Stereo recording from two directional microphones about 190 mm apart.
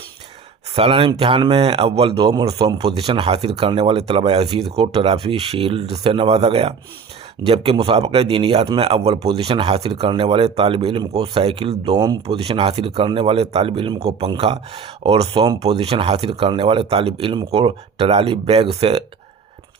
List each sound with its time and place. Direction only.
0.8 s a man's voice: 30° right (ahead or behind)
11.9 s a man's voice: 20° right (ahead or behind)
12.2 s a man's voice: 30° right (ahead or behind)